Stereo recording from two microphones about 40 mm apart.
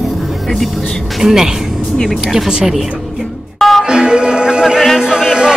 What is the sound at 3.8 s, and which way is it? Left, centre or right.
Music, centre.